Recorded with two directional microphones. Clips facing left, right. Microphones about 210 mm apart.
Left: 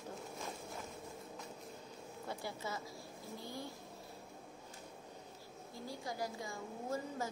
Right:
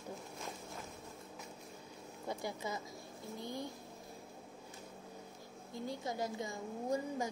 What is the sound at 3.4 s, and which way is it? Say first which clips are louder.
Vehicle: right 5 dB; 20° right (ahead or behind).